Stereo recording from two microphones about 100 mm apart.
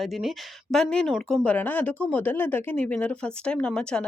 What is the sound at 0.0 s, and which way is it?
Speech, centre (ahead or behind).